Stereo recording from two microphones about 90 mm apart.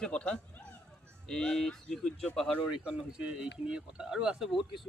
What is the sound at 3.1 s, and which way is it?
Speech, 10° right (ahead or behind).